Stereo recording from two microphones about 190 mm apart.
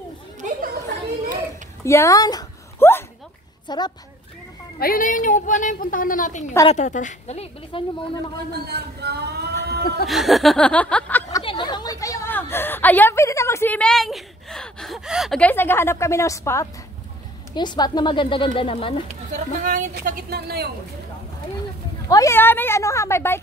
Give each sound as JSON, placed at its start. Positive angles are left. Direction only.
{"t": 0.4, "sound": "chatter", "side_deg": -40}
{"t": 1.9, "sound": "dog", "side_deg": 15}
{"t": 3.6, "sound": "a woman's voice", "side_deg": 20}
{"t": 4.7, "sound": "a woman's voice", "side_deg": 50}
{"t": 8.6, "sound": "a sound", "side_deg": -60}
{"t": 10.0, "sound": "speech", "side_deg": 0}
{"t": 11.4, "sound": "a woman's voice", "side_deg": 25}
{"t": 19.3, "sound": "a woman's voice", "side_deg": -40}
{"t": 19.9, "sound": "a woman's voice", "side_deg": -55}
{"t": 22.1, "sound": "speech", "side_deg": 15}